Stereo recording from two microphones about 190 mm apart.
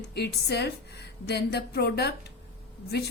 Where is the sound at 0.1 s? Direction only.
60° left (ahead or behind).